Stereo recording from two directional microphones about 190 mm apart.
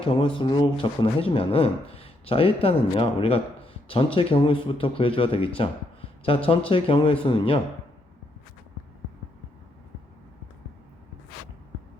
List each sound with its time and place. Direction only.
0.0 s speech: 30° left (ahead or behind)